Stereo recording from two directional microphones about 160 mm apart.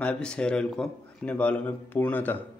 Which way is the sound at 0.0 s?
5° left (ahead or behind).